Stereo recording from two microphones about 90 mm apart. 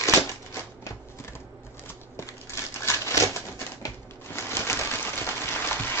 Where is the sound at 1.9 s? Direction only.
30° left (ahead or behind).